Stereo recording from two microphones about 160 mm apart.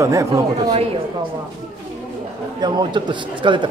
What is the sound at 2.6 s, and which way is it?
Speech, 30° right (ahead or behind).